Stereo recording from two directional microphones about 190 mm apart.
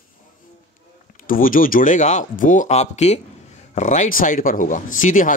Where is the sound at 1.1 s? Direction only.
45° left (ahead or behind).